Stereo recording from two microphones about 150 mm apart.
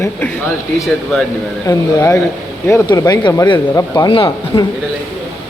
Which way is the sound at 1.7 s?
20° left (ahead or behind).